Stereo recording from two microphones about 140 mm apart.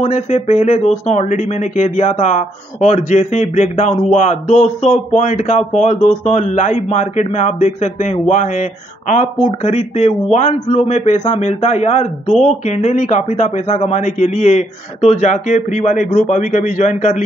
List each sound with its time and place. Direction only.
0.0 s a man's voice: 55° left (ahead or behind)